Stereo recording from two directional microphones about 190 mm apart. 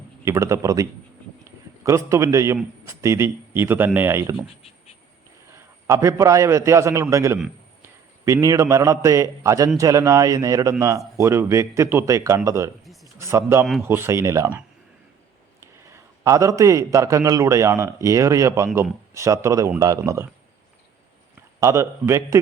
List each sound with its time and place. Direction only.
0.3 s a man's voice: 15° right (ahead or behind)
5.5 s a man's voice: 15° right (ahead or behind)
12.8 s a sound: centre (ahead or behind)
13.1 s a man's voice: 15° right (ahead or behind)
15.6 s a man's voice: 15° right (ahead or behind)
21.6 s a man's voice: 15° right (ahead or behind)